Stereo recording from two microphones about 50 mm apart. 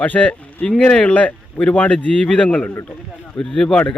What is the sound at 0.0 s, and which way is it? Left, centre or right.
Speech, left.